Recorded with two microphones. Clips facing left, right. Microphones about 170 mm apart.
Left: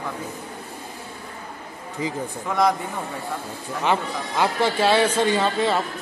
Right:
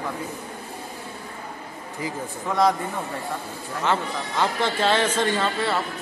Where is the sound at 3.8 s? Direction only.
10° left (ahead or behind).